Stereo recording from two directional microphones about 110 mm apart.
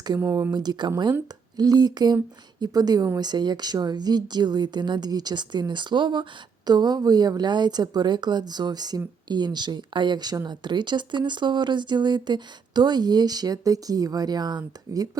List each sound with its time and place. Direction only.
0.2 s speech: 30° right (ahead or behind)
0.5 s speech: 40° right (ahead or behind)